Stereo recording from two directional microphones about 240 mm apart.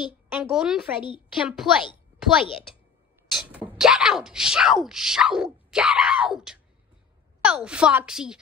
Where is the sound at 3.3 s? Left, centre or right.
Centre.